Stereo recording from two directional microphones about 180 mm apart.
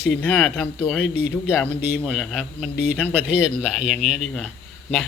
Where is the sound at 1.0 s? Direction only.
70° left (ahead or behind).